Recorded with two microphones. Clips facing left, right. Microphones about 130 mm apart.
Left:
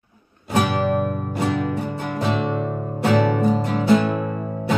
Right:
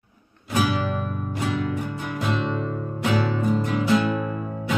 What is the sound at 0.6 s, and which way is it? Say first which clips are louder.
Music: left 4 dB; 40° left (ahead or behind).